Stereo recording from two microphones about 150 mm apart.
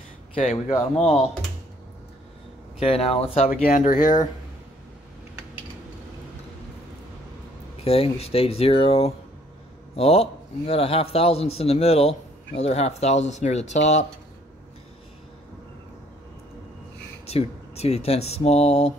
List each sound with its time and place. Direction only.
0.3 s a man's voice: 40° left (ahead or behind)
2.8 s speech: 40° left (ahead or behind)
3.6 s speech: 65° left (ahead or behind)
7.8 s a man's voice: 40° left (ahead or behind)
17.3 s a man's voice: 45° left (ahead or behind)